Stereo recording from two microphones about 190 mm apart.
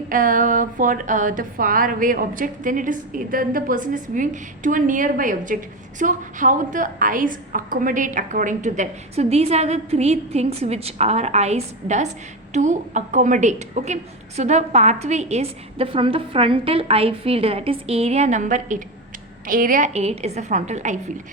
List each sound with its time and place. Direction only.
0.1 s a woman's voice: 45° right (ahead or behind)